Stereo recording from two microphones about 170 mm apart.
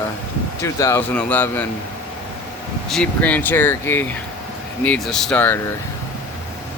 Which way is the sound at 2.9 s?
5° left (ahead or behind).